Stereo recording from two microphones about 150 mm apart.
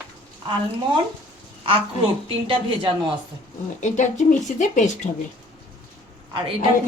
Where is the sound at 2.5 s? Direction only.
30° right (ahead or behind).